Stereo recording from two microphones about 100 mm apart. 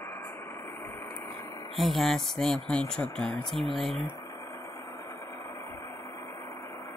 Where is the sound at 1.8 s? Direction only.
Centre (ahead or behind).